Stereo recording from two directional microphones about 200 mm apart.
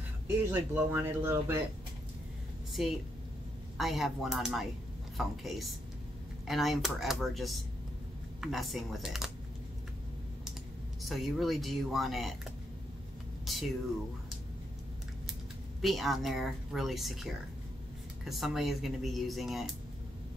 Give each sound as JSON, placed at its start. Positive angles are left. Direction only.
{"t": 0.5, "sound": "speech", "side_deg": -10}
{"t": 2.8, "sound": "speech", "side_deg": 0}
{"t": 11.1, "sound": "speech", "side_deg": 0}
{"t": 13.5, "sound": "speech", "side_deg": 0}
{"t": 15.8, "sound": "speech", "side_deg": 0}